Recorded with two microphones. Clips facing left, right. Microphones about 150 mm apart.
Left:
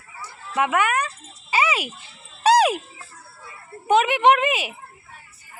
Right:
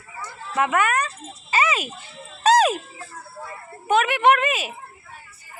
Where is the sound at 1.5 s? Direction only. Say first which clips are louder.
Even; 10° left (ahead or behind).